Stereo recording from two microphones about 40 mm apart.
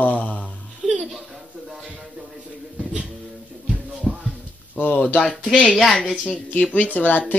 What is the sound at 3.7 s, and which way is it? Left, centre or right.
Music, right.